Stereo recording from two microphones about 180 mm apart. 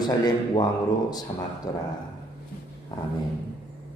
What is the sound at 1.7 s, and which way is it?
Speech, 20° left (ahead or behind).